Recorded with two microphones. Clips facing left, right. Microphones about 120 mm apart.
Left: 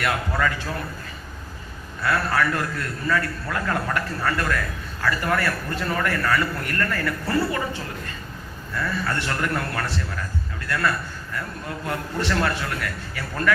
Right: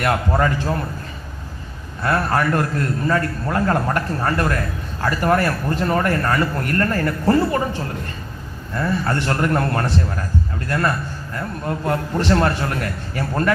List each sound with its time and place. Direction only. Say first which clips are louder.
0.1 s a man's voice: right 5 dB; 40° right (ahead or behind)
2.0 s a man's voice: right 3 dB; 35° right (ahead or behind)
8.7 s a man's voice: right 5 dB; 35° right (ahead or behind)